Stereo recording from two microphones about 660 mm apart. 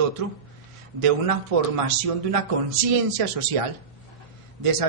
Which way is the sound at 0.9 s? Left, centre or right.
Right.